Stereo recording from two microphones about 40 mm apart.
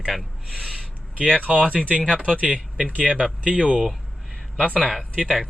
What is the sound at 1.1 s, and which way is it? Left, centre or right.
Speech, left.